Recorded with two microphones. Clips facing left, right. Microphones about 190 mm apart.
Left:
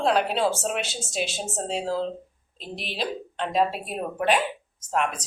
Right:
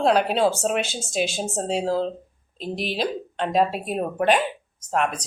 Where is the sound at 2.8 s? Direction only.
Centre (ahead or behind).